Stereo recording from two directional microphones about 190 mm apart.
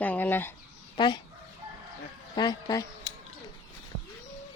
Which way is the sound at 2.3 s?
20° left (ahead or behind).